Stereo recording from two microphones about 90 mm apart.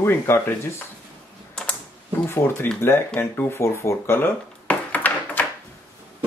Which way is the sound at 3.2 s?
25° left (ahead or behind).